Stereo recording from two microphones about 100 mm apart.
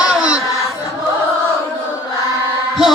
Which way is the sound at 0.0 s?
10° right (ahead or behind).